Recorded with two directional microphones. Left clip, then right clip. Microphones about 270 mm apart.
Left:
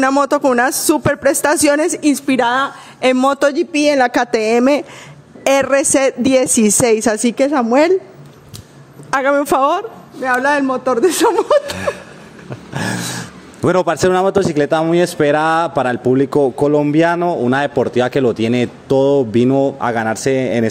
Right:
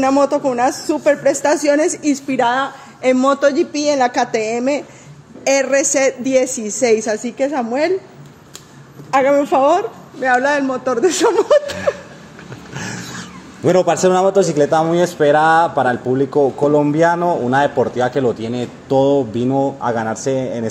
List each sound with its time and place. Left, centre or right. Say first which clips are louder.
0.0 s speech: left 1 dB; left
3.0 s speech: left 1 dB; left
9.1 s speech: right 1 dB; left
10.2 s speech: even; centre
11.7 s speech: right 1 dB; left
12.7 s a sound: left 6 dB; left
13.7 s speech: right 1 dB; left